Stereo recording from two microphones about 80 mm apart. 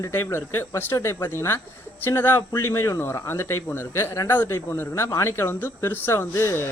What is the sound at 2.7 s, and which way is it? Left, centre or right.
Speech, left.